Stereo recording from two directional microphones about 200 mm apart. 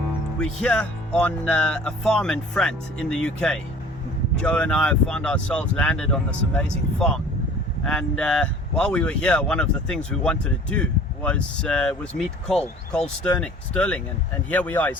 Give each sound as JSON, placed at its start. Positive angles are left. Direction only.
{"t": 0.3, "sound": "speech", "side_deg": 5}